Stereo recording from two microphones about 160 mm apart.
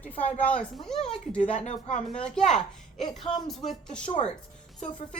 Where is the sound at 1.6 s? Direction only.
40° left (ahead or behind).